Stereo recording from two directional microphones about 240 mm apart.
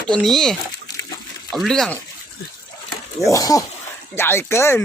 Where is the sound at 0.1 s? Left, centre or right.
Centre.